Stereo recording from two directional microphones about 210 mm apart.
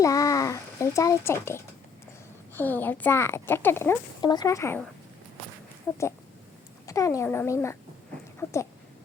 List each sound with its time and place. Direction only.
0.0 s a child's voice: 15° left (ahead or behind)
6.8 s a child's voice: 15° left (ahead or behind)
8.4 s a sound: 10° left (ahead or behind)